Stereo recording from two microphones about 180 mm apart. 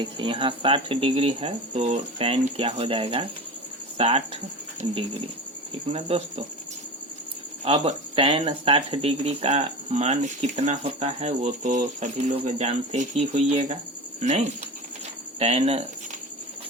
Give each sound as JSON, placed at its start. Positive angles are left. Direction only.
{"t": 0.0, "sound": "speech", "side_deg": -30}
{"t": 7.6, "sound": "speech", "side_deg": -35}